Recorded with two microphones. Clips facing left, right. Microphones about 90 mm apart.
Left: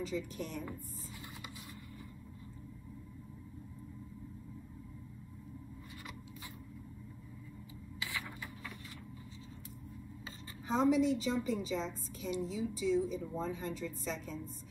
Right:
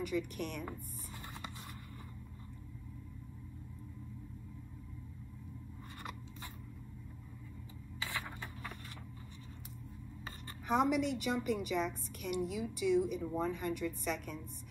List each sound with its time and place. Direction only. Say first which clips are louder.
0.0 s a woman's voice: right 2 dB; 60° right (ahead or behind)
10.2 s a woman's voice: right 2 dB; 65° right (ahead or behind)